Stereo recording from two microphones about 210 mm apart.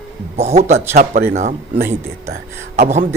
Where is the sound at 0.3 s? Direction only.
30° right (ahead or behind).